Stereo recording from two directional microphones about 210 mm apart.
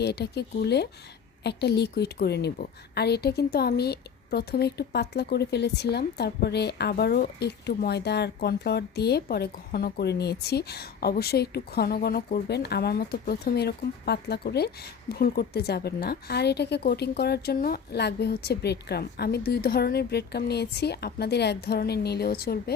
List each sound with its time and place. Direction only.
0.0 s a woman's voice: 50° left (ahead or behind)